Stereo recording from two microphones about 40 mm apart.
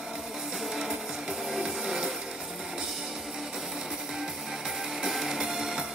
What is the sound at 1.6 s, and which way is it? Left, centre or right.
Music, centre.